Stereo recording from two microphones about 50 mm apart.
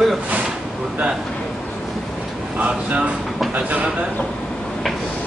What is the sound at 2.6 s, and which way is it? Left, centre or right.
Speech, right.